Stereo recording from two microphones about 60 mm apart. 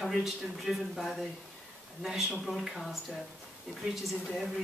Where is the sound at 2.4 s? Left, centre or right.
Centre.